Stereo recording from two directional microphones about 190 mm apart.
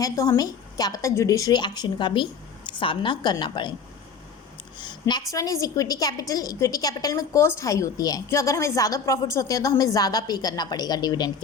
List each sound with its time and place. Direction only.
0.0 s a woman's voice: 20° left (ahead or behind)
4.8 s a sound: 25° left (ahead or behind)
5.3 s a woman's voice: 15° left (ahead or behind)